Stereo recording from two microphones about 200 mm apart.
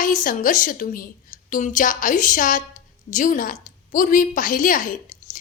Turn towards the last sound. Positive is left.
turn(degrees=40)  # may be behind; listen again after turning